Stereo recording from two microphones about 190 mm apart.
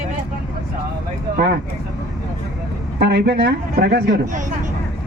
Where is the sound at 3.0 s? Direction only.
65° right (ahead or behind).